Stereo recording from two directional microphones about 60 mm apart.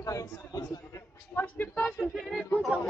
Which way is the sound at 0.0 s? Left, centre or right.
Left.